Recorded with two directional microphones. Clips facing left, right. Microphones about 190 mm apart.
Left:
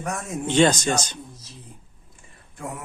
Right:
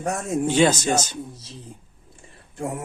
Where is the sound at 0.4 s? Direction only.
10° right (ahead or behind).